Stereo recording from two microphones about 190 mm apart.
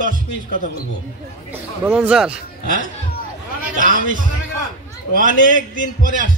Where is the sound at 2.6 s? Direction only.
45° right (ahead or behind).